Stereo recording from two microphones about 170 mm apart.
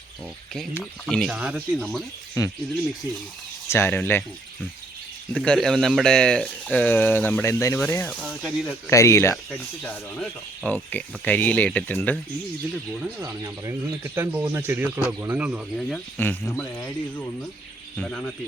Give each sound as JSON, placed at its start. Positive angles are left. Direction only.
{"t": 0.8, "sound": "speech", "side_deg": 5}
{"t": 1.4, "sound": "speech", "side_deg": -5}
{"t": 2.4, "sound": "speech", "side_deg": 20}
{"t": 3.7, "sound": "speech", "side_deg": 15}
{"t": 5.4, "sound": "speech", "side_deg": 0}
{"t": 8.2, "sound": "speech", "side_deg": 0}
{"t": 8.9, "sound": "speech", "side_deg": 15}
{"t": 9.3, "sound": "speech", "side_deg": 5}
{"t": 13.2, "sound": "speech", "side_deg": -20}
{"t": 15.8, "sound": "speech", "side_deg": 5}